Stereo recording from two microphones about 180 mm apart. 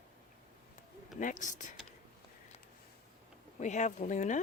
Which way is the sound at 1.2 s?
45° left (ahead or behind).